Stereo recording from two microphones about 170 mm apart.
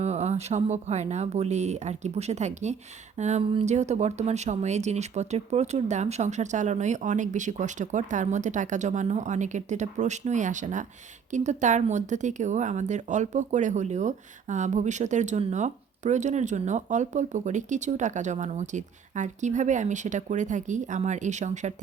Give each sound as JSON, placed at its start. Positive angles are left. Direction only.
{"t": 0.0, "sound": "speech", "side_deg": -40}